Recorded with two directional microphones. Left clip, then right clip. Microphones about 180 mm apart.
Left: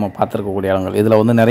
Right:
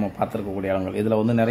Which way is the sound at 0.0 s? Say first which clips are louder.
Left 7 dB; 30° left (ahead or behind).